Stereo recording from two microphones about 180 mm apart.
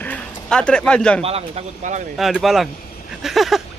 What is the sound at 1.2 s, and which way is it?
Speech, 35° right (ahead or behind).